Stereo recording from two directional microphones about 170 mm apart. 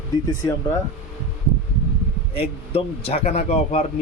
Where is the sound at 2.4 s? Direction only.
35° left (ahead or behind).